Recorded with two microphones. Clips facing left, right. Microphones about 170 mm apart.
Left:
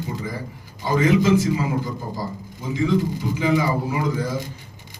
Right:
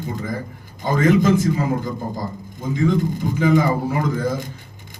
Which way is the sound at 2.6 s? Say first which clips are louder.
Right 2 dB; 50° right (ahead or behind).